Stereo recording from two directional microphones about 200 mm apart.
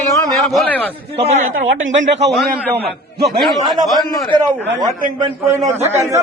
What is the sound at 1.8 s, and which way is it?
Speech, 60° right (ahead or behind).